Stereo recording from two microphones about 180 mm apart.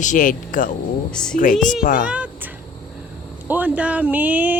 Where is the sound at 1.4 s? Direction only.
45° left (ahead or behind).